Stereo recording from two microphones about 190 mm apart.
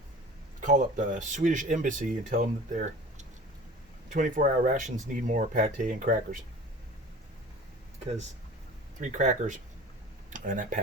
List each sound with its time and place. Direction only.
0.6 s speech: 40° right (ahead or behind)
9.0 s speech: 40° right (ahead or behind)